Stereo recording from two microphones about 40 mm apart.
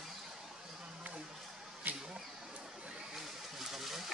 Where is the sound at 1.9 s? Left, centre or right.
Right.